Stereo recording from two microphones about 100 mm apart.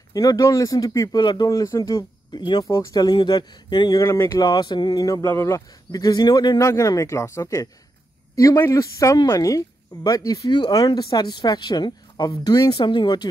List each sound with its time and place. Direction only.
0.1 s speech: 40° left (ahead or behind)
1.5 s speech: 35° left (ahead or behind)
2.4 s speech: 45° left (ahead or behind)
2.7 s speech: 35° left (ahead or behind)
4.0 s speech: 30° left (ahead or behind)
5.9 s speech: 45° left (ahead or behind)